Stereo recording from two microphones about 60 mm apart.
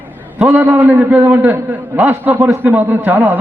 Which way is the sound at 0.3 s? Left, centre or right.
Centre.